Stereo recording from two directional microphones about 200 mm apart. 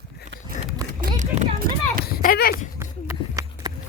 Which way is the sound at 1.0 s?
35° right (ahead or behind).